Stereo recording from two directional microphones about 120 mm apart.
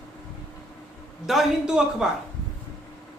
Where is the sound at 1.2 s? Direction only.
Centre (ahead or behind).